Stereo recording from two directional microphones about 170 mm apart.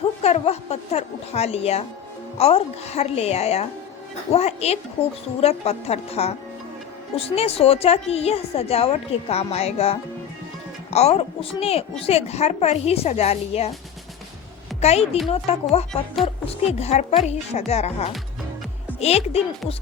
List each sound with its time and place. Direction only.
0.0 s a woman's voice: 35° left (ahead or behind)
14.8 s a woman's voice: 40° left (ahead or behind)
16.2 s a woman's voice: 35° left (ahead or behind)